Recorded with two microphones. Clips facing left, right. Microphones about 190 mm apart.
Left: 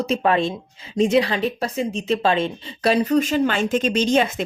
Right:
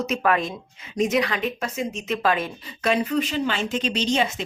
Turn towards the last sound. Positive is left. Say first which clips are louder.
# left 5 dB
turn(degrees=50)  # may be behind; listen again after turning